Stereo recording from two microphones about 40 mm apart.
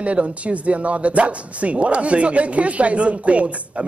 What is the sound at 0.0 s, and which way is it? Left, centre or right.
Speech, right.